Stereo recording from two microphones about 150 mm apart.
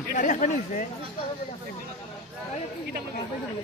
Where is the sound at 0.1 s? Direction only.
60° left (ahead or behind).